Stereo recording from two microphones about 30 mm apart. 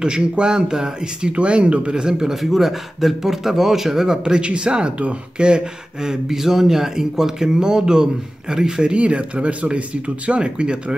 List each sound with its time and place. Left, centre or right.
0.0 s speech: right
1.3 s speech: right
2.3 s a man's voice: centre
4.2 s speech: right
8.8 s speech: right
10.4 s speech: right